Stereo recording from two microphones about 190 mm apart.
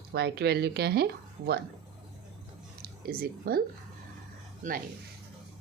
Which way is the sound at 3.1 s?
50° right (ahead or behind).